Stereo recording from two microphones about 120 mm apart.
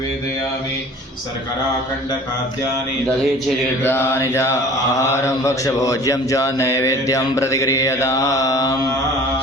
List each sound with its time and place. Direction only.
3.8 s speech: 20° left (ahead or behind)